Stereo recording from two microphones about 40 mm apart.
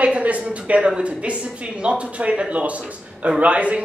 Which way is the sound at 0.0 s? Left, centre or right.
Right.